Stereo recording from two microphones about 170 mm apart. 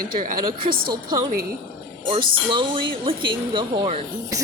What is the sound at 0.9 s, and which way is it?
A woman's voice, 25° right (ahead or behind).